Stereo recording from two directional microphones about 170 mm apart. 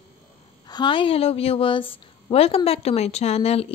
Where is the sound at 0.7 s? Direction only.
25° left (ahead or behind).